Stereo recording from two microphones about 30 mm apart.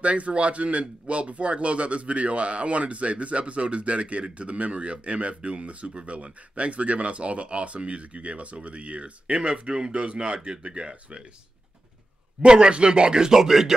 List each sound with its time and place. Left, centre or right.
0.0 s speech: right
12.4 s speech: right
13.3 s speech: centre